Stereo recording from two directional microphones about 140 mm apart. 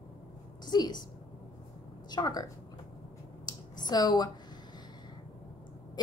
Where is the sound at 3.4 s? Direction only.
30° left (ahead or behind).